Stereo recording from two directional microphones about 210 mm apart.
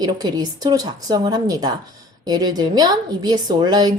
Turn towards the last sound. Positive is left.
turn(degrees=-20)  # may be behind; listen again after turning